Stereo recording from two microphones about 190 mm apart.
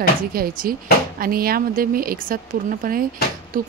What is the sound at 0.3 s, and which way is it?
Speech, 50° right (ahead or behind).